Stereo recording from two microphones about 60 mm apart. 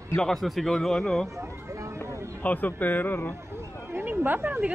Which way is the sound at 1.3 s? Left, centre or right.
Right.